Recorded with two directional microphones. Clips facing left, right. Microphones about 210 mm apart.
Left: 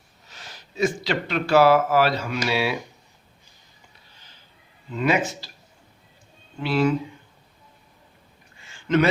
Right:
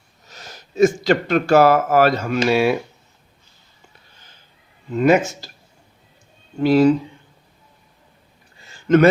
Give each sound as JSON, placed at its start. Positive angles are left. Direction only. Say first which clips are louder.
{"t": 0.3, "sound": "speech", "louder": "right 4 dB", "side_deg": -45}
{"t": 4.9, "sound": "speech", "louder": "right 7 dB", "side_deg": -45}
{"t": 6.6, "sound": "speech", "louder": "right 8 dB", "side_deg": -40}
{"t": 8.6, "sound": "a sound", "louder": "right 6 dB", "side_deg": -45}